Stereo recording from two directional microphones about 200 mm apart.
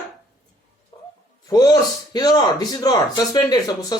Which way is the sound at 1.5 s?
20° left (ahead or behind).